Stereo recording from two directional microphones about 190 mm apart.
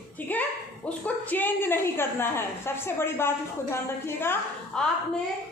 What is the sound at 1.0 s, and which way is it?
A woman's voice, 10° left (ahead or behind).